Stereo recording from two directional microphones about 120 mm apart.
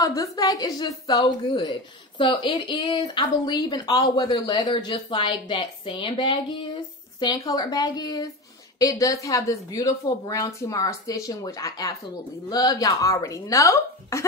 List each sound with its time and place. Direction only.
0.0 s a woman's voice: 30° left (ahead or behind)